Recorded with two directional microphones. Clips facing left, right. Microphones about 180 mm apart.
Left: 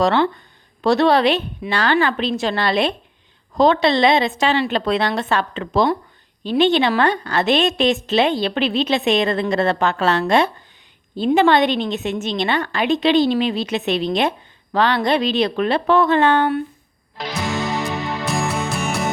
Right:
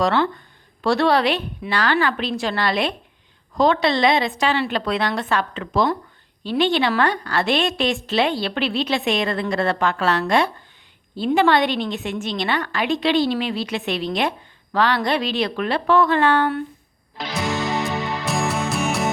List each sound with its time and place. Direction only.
0.0 s a woman's voice: 25° left (ahead or behind)
17.2 s music: centre (ahead or behind)